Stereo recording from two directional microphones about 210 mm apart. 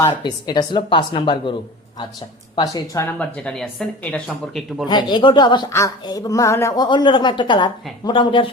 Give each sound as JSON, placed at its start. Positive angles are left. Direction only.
{"t": 0.0, "sound": "speech", "side_deg": 20}
{"t": 2.6, "sound": "speech", "side_deg": 20}
{"t": 4.9, "sound": "speech", "side_deg": 20}